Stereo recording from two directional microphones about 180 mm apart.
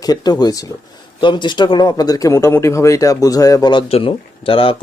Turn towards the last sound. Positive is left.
turn(degrees=30)  # may be behind; listen again after turning